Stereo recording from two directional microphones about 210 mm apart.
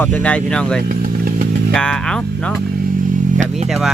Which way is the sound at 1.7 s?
5° left (ahead or behind).